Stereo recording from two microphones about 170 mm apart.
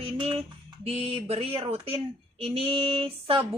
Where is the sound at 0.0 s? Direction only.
35° right (ahead or behind).